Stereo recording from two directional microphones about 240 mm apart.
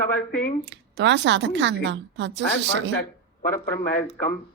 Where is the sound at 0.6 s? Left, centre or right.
Right.